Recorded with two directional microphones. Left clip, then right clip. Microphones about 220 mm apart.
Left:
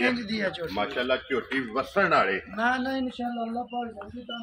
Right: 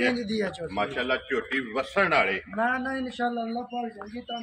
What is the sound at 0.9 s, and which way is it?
Speech, 35° left (ahead or behind).